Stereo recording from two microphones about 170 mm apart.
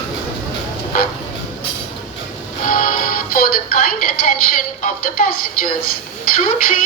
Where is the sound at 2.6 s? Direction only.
55° left (ahead or behind).